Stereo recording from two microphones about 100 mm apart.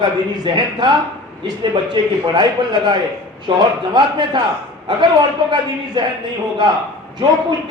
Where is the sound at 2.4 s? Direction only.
50° right (ahead or behind).